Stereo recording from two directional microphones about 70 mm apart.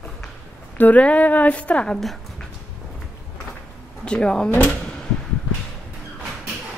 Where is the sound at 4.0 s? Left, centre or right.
Centre.